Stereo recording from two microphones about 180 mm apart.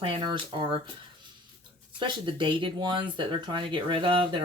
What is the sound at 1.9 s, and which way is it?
Speech, 25° right (ahead or behind).